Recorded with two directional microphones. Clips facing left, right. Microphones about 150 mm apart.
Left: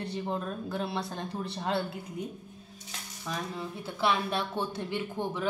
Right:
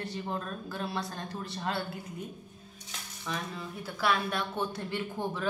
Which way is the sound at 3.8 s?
25° left (ahead or behind).